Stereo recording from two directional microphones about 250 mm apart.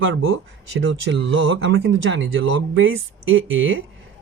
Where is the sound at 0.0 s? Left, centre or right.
Right.